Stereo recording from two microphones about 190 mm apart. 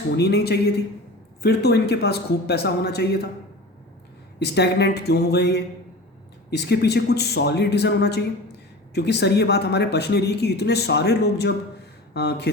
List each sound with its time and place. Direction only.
0.2 s speech: 60° left (ahead or behind)
4.4 s speech: 60° left (ahead or behind)